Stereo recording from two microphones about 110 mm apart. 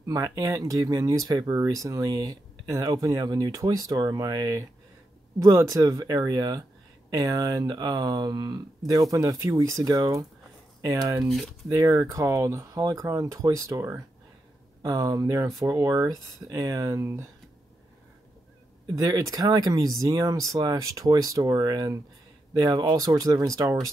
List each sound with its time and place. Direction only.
0.0 s speech: 30° right (ahead or behind)
11.2 s speech: centre (ahead or behind)
11.7 s speech: 30° right (ahead or behind)
18.9 s speech: 30° right (ahead or behind)